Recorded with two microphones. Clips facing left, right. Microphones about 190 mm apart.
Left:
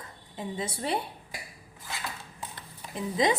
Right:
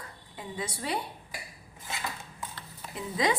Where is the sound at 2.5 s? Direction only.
20° left (ahead or behind).